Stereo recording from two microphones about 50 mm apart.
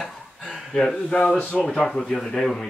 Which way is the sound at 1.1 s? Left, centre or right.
Centre.